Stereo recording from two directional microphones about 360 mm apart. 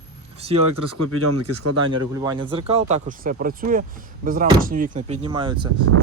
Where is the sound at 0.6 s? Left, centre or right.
Right.